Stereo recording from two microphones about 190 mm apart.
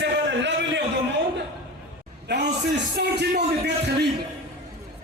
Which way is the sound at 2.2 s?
65° right (ahead or behind).